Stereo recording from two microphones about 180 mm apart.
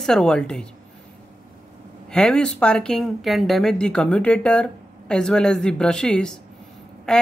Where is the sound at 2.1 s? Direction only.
5° left (ahead or behind).